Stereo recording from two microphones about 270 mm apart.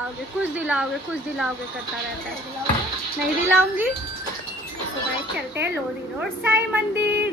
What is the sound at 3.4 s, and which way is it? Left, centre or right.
Speech, centre.